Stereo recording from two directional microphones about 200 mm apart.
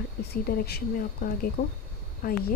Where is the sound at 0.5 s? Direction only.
50° left (ahead or behind).